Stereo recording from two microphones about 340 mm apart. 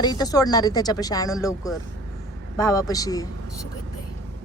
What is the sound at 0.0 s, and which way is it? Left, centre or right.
Speech, centre.